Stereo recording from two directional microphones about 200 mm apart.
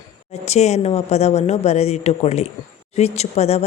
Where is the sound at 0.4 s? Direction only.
35° left (ahead or behind).